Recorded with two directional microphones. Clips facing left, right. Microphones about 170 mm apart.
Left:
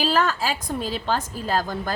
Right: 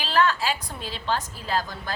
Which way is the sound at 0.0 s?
45° left (ahead or behind).